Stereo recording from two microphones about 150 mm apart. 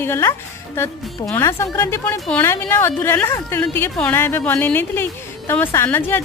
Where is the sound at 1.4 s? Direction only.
20° left (ahead or behind).